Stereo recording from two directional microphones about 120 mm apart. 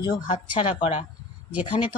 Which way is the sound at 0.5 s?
50° left (ahead or behind).